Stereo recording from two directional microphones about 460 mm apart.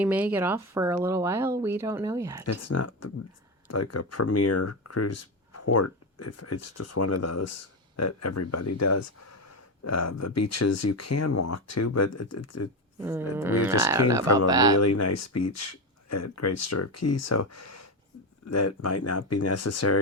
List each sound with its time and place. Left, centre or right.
0.0 s speech: centre
2.5 s speech: left
13.0 s speech: centre
14.8 s speech: left